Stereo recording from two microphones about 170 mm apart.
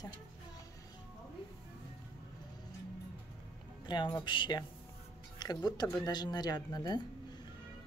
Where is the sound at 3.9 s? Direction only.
25° left (ahead or behind).